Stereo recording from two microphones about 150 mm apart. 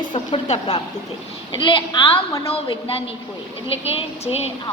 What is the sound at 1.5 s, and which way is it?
A woman's voice, 35° left (ahead or behind).